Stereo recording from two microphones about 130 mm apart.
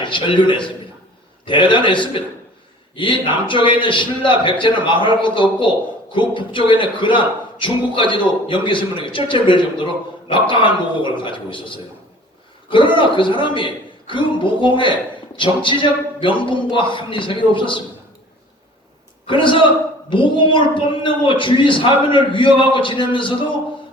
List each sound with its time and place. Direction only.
0.0 s a man's voice: 40° left (ahead or behind)
19.3 s a man's voice: 40° left (ahead or behind)